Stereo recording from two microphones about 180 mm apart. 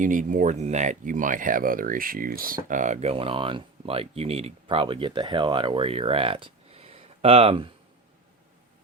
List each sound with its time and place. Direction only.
0.0 s speech: 45° right (ahead or behind); by 7.7 s 30° right (ahead or behind)